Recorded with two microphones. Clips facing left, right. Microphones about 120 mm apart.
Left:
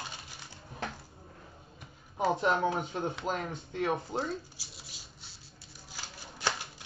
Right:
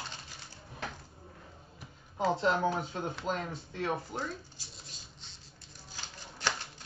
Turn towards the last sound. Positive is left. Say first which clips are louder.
# left 1 dB
turn(degrees=10)  # may be behind; listen again after turning